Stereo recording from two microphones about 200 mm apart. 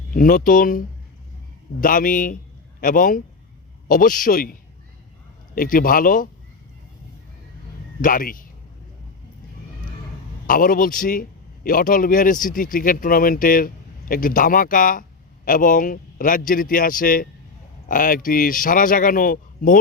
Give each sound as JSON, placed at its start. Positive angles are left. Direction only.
{"t": 0.1, "sound": "a man's voice", "side_deg": 45}
{"t": 1.8, "sound": "a man's voice", "side_deg": 45}
{"t": 5.5, "sound": "a man's voice", "side_deg": 45}
{"t": 8.0, "sound": "a man's voice", "side_deg": 45}
{"t": 10.4, "sound": "a man's voice", "side_deg": 45}